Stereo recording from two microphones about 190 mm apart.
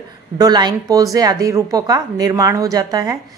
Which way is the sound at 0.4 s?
20° right (ahead or behind).